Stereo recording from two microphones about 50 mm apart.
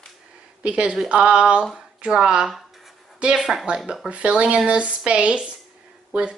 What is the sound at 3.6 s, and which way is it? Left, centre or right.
A woman's voice, centre.